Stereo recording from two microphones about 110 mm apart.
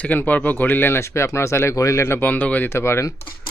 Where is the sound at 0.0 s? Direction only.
15° left (ahead or behind).